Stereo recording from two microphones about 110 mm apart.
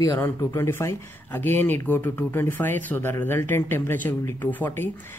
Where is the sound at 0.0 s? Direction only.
25° left (ahead or behind).